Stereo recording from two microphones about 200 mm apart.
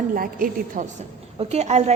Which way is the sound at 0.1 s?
45° right (ahead or behind).